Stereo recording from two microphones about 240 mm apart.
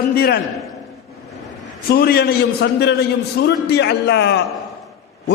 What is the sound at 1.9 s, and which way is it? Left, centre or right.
A man's voice, left.